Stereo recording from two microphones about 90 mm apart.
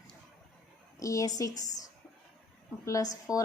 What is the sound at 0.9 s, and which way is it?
A woman's voice, 40° left (ahead or behind).